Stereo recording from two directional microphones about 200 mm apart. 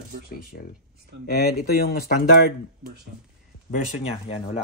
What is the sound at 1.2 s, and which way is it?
Speech, 50° left (ahead or behind).